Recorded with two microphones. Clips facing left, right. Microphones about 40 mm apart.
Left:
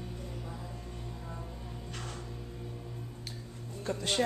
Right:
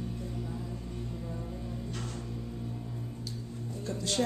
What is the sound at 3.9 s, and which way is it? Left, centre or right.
Speech, left.